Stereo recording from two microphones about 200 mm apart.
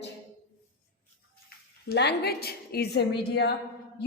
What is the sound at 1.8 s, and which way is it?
A woman's voice, 55° left (ahead or behind).